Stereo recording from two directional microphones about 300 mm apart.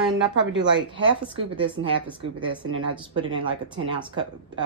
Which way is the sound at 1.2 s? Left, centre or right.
Centre.